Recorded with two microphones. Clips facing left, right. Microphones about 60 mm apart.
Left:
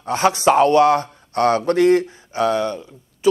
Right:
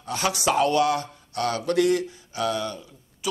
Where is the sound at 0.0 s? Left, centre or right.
Left.